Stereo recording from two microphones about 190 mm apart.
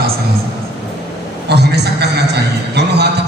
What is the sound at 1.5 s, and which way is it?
A man's voice, 60° right (ahead or behind).